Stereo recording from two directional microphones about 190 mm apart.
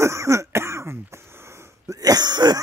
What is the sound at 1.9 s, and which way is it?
Throat clearing, 20° right (ahead or behind).